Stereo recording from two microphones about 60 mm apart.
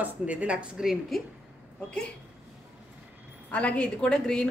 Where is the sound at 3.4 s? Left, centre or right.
Left.